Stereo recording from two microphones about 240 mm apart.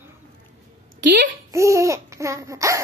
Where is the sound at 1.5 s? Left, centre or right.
Centre.